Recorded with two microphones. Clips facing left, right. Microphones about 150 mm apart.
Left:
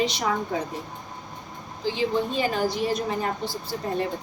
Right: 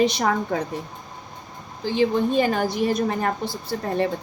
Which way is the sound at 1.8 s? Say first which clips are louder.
Right 4 dB; 55° right (ahead or behind).